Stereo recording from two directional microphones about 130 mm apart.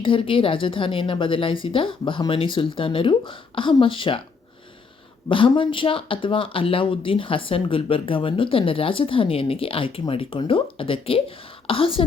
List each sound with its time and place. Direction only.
0.0 s a woman's voice: 40° left (ahead or behind)
5.3 s speech: 40° left (ahead or behind)